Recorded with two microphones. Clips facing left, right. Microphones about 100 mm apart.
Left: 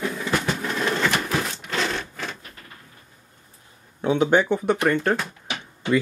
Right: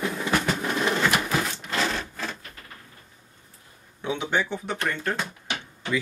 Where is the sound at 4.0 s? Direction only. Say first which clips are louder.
Left 8 dB; 45° left (ahead or behind).